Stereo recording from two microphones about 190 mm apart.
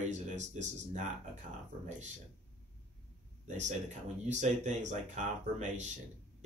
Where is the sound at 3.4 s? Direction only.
40° right (ahead or behind).